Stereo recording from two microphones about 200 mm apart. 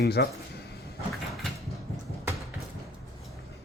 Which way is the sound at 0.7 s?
50° left (ahead or behind).